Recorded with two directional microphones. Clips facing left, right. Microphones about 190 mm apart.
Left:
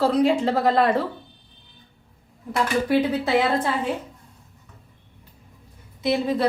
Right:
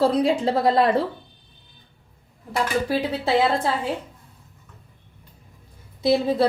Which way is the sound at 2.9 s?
30° right (ahead or behind).